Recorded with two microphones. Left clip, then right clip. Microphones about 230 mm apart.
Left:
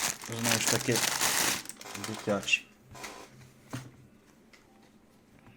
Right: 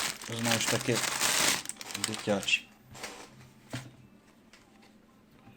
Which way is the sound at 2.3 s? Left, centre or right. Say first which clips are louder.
Even; centre.